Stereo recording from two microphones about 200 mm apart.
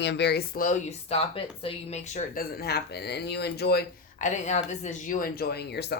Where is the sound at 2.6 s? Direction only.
55° left (ahead or behind).